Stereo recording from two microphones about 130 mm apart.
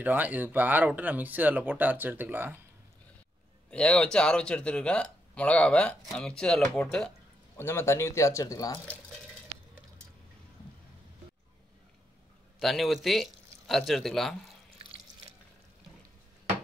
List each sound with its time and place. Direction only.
0.0 s speech: 15° right (ahead or behind)
3.7 s speech: 5° left (ahead or behind)
7.5 s speech: 20° left (ahead or behind)
12.5 s speech: centre (ahead or behind)